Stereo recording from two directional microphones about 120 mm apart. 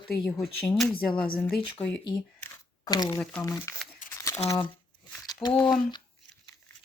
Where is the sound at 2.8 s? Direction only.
35° left (ahead or behind).